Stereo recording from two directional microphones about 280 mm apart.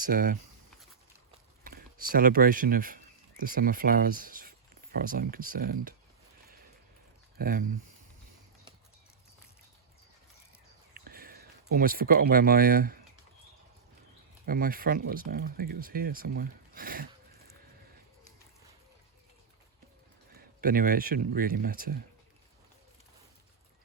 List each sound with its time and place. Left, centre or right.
0.0 s speech: right
1.6 s speech: right
7.3 s speech: right
10.9 s a sound: right
14.4 s speech: right
20.3 s speech: right